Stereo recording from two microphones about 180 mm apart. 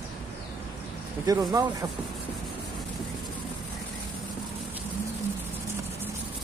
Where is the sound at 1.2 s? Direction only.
20° right (ahead or behind).